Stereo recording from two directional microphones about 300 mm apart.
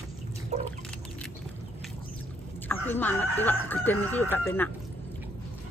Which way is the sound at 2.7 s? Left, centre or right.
Centre.